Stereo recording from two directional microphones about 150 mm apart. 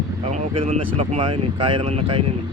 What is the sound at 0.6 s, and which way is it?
Speech, 45° right (ahead or behind).